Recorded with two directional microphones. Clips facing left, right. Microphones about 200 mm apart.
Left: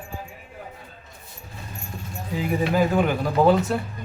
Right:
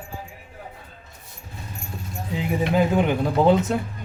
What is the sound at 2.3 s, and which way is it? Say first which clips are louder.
Speech: right 1 dB; 20° right (ahead or behind).